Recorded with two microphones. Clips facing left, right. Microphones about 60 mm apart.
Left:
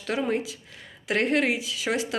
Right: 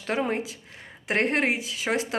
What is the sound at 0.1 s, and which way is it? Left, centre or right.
Speech, right.